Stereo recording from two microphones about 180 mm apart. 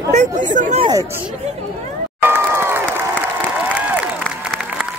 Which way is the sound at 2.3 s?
15° right (ahead or behind).